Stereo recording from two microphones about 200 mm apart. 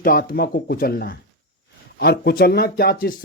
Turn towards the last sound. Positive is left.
turn(degrees=45)  # may be behind; listen again after turning